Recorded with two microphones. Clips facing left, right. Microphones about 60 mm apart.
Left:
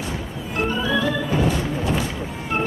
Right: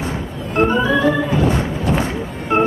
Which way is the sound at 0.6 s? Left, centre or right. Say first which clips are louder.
Right 7 dB; right.